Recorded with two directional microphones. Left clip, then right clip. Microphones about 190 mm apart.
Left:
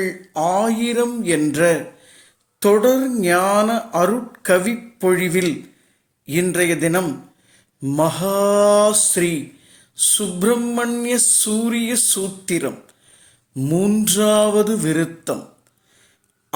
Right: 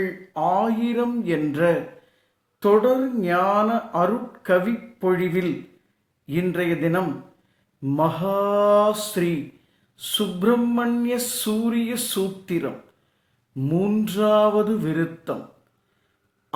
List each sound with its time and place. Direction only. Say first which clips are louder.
0.0 s speech: left 3 dB; 40° left (ahead or behind)
7.8 s mantra: left 3 dB; 45° left (ahead or behind)
10.0 s speech: left 3 dB; 45° left (ahead or behind)